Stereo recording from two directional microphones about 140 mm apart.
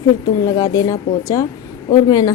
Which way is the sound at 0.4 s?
25° left (ahead or behind).